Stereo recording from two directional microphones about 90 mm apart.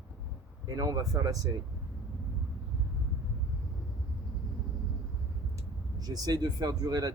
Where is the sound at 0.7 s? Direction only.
40° right (ahead or behind).